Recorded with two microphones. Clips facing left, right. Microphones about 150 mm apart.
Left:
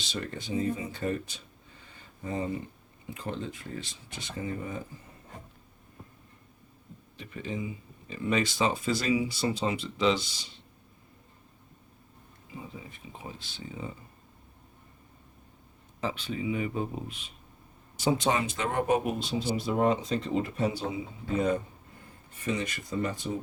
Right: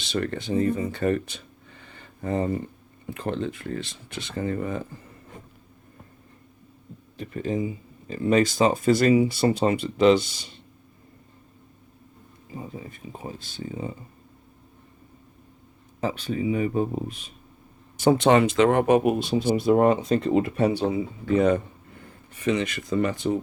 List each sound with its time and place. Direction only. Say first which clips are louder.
0.0 s speech: right 8 dB; 60° right (ahead or behind)
7.2 s speech: right 8 dB; 45° right (ahead or behind)
12.5 s speech: right 6 dB; 40° right (ahead or behind)
16.0 s speech: right 6 dB; 40° right (ahead or behind)
17.9 s speech: right 9 dB; 55° right (ahead or behind); by 21.6 s 70° right (ahead or behind)
22.3 s speech: right 7 dB; 85° right